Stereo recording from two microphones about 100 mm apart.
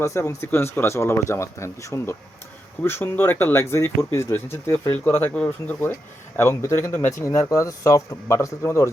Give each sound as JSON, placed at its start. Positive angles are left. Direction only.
{"t": 0.0, "sound": "speech", "side_deg": 25}